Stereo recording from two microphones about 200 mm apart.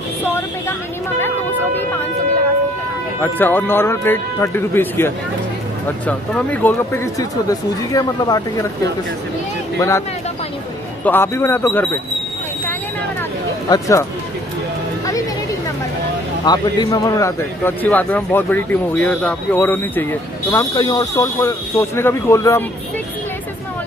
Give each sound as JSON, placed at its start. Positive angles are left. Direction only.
{"t": 0.2, "sound": "a man's voice", "side_deg": 10}
{"t": 3.2, "sound": "a man's voice", "side_deg": 10}
{"t": 9.8, "sound": "a man's voice", "side_deg": 15}
{"t": 11.1, "sound": "a man's voice", "side_deg": 10}
{"t": 13.7, "sound": "a man's voice", "side_deg": 15}
{"t": 16.4, "sound": "a man's voice", "side_deg": 20}